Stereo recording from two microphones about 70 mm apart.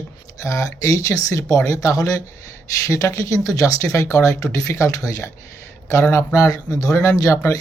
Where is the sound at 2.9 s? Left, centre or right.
Left.